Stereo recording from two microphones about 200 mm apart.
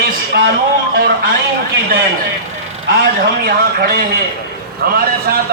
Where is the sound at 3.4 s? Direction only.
50° right (ahead or behind).